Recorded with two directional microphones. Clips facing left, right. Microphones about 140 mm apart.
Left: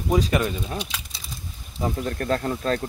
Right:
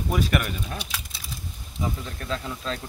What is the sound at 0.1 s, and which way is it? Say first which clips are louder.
Speech: left 4 dB; 20° left (ahead or behind).